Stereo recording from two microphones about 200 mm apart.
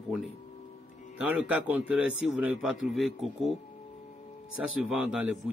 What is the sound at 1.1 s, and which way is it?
A man's voice, 5° right (ahead or behind).